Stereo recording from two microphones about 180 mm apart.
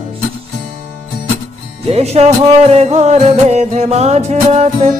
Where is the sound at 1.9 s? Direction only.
35° right (ahead or behind).